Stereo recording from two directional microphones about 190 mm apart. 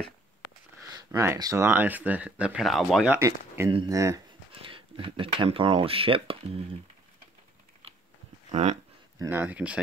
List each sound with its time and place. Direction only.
0.9 s speech: 15° right (ahead or behind); by 3.2 s centre (ahead or behind)
3.2 s speech: 15° right (ahead or behind)
4.6 s speech: 25° right (ahead or behind)
8.5 s speech: 35° right (ahead or behind)
9.2 s speech: 10° right (ahead or behind)